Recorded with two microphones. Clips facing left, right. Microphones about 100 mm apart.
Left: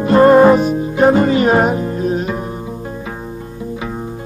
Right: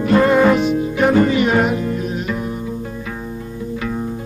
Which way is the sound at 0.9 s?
25° left (ahead or behind).